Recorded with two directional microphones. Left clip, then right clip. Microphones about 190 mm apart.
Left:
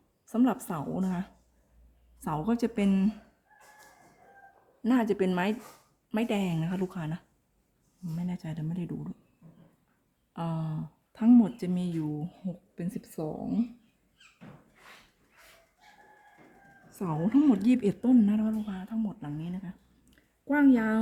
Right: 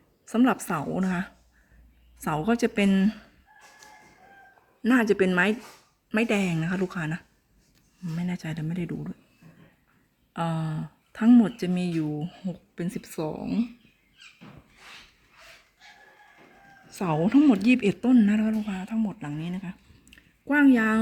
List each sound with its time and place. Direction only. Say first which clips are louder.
0.3 s speech: right 5 dB; 5° right (ahead or behind)
4.8 s speech: right 5 dB; 5° right (ahead or behind)
10.3 s speech: right 6 dB; 10° right (ahead or behind)
16.9 s speech: right 5 dB; 5° right (ahead or behind)
18.6 s speech: right 5 dB; 20° right (ahead or behind)